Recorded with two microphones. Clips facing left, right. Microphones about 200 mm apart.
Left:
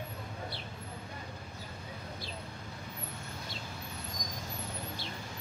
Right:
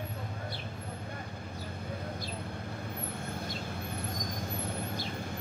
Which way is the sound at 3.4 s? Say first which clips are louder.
Right 6 dB; 55° right (ahead or behind).